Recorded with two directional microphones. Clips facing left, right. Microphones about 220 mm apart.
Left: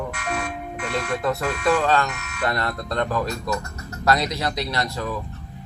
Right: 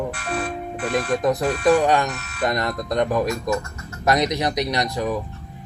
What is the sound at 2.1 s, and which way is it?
Speech, 35° right (ahead or behind).